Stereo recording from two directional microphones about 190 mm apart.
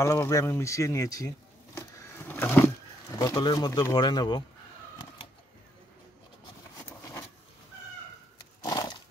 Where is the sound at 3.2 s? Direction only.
20° left (ahead or behind).